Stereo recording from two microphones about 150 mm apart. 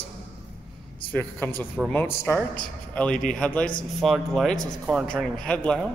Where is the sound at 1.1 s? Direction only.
15° left (ahead or behind).